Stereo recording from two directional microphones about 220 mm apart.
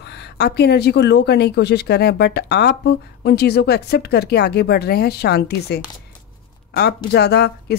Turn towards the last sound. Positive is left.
turn(degrees=50)  # may be behind; listen again after turning